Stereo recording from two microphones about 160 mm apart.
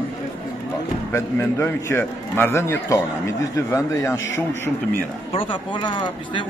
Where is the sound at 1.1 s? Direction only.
15° left (ahead or behind).